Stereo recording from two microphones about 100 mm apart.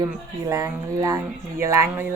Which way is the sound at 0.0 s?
35° right (ahead or behind).